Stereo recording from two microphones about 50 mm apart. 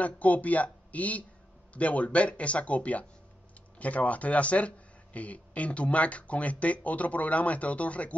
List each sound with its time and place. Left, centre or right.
0.0 s speech: left